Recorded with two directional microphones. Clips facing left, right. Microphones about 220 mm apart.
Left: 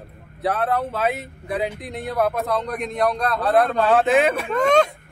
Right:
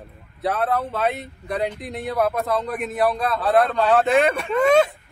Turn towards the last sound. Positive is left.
turn(degrees=-5)  # may be behind; listen again after turning